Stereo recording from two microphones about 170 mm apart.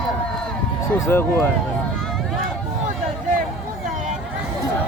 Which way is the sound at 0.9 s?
15° left (ahead or behind).